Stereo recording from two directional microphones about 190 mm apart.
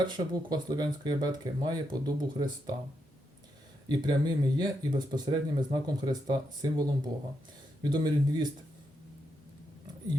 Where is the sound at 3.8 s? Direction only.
20° right (ahead or behind).